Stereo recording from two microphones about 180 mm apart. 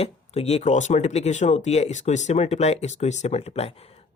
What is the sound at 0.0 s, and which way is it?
Speech, 35° left (ahead or behind).